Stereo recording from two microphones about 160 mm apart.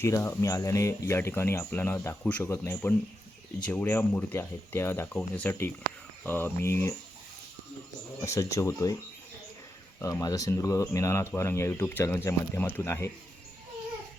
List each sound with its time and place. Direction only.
0.0 s speech: 15° left (ahead or behind)
8.2 s speech: 20° left (ahead or behind)
10.0 s speech: 20° left (ahead or behind)